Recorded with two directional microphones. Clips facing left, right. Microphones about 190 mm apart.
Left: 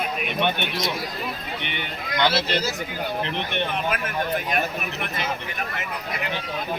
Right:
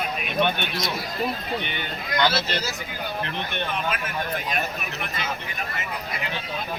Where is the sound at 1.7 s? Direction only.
25° left (ahead or behind).